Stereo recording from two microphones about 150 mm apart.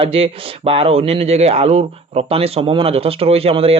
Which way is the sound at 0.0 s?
40° right (ahead or behind).